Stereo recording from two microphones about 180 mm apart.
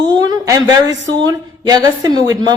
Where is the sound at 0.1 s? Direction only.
25° right (ahead or behind).